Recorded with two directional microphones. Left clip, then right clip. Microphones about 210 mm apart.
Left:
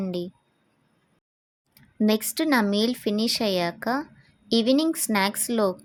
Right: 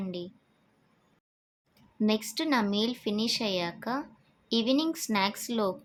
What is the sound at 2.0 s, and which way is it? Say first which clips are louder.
Speech: left 5 dB; 30° left (ahead or behind).